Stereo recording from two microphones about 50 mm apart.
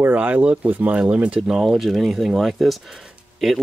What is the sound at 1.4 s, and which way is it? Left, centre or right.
Speech, centre.